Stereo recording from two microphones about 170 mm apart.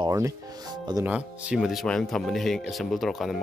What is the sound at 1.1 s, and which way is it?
Speech, 5° right (ahead or behind).